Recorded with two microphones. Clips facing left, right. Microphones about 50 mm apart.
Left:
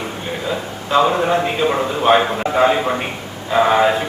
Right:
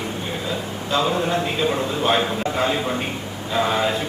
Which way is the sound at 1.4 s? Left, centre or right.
Centre.